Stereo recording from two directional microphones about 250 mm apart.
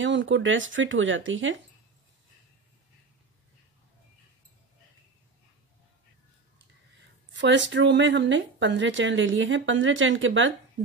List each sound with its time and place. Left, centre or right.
0.0 s speech: right
7.3 s speech: right